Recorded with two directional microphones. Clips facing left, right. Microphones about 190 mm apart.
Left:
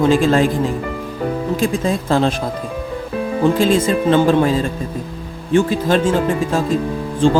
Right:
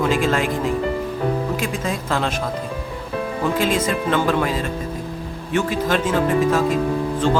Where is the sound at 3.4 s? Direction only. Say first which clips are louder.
Left 6 dB; 30° left (ahead or behind).